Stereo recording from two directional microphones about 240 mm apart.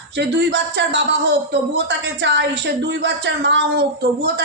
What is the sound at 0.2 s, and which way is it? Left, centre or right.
A man's voice, right.